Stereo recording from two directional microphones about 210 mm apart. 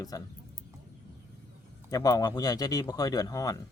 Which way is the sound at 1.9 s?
15° left (ahead or behind).